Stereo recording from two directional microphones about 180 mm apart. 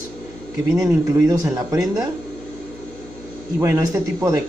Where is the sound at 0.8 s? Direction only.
20° right (ahead or behind).